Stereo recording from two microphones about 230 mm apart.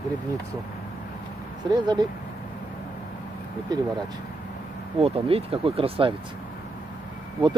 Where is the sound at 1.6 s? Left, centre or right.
Centre.